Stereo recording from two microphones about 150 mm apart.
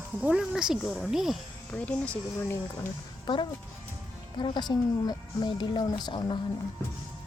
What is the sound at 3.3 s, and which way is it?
A woman's voice, 30° left (ahead or behind).